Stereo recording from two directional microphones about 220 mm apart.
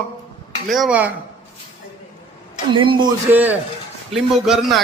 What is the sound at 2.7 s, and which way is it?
Speech, 25° right (ahead or behind).